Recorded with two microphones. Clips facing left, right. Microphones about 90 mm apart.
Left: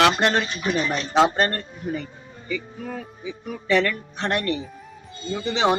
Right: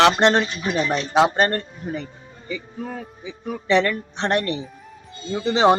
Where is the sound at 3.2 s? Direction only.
30° right (ahead or behind).